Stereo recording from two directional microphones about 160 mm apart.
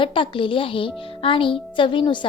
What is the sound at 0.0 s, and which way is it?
A woman's voice, 30° left (ahead or behind).